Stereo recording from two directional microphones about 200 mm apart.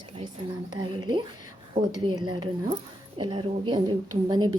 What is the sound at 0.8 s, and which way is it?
Speech, 20° right (ahead or behind).